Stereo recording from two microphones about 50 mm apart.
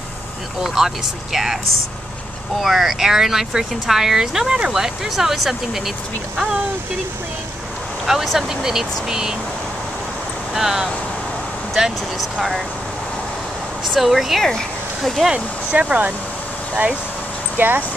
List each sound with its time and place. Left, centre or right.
0.7 s speech: centre
2.6 s speech: centre
8.1 s speech: centre
10.5 s speech: centre
13.9 s speech: centre
15.7 s speech: right
17.6 s speech: right